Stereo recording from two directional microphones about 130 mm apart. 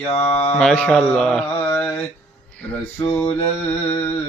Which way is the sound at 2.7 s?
10° left (ahead or behind).